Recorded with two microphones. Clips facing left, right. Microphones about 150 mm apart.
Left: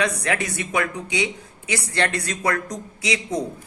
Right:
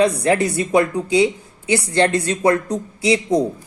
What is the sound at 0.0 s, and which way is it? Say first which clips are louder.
Speech: right 8 dB; 30° right (ahead or behind).